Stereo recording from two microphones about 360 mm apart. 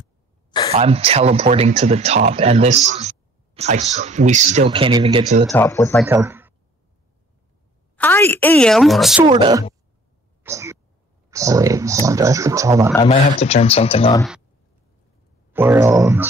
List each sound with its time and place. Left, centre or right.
0.0 s a sound: centre
0.7 s speech: centre
5.5 s speech: centre
6.0 s speech: centre
7.9 s a woman's voice: centre
9.3 s speech: centre
10.4 s throat clearing: centre
11.2 s speech: centre
12.9 s speech: centre
15.5 s speech: centre